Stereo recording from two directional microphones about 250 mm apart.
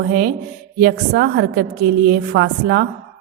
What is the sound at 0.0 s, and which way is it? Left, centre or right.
A woman's voice, right.